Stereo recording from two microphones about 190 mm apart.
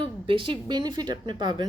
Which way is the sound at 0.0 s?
25° right (ahead or behind).